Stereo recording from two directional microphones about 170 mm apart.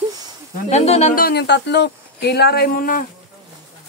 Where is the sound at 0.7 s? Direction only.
40° left (ahead or behind).